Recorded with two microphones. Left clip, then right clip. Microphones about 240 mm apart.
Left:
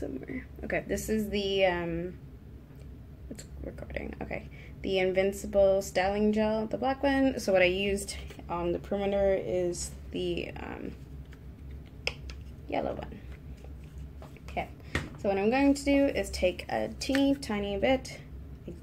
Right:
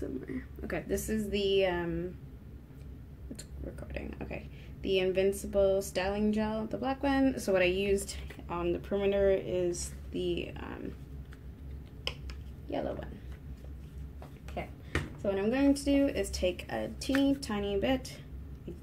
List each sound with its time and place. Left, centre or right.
0.2 s a woman's voice: centre
3.9 s a woman's voice: centre
12.6 s a woman's voice: centre
15.2 s a woman's voice: centre